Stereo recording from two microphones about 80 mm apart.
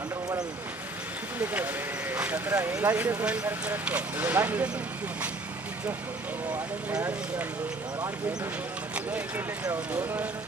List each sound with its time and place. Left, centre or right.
1.4 s speech: right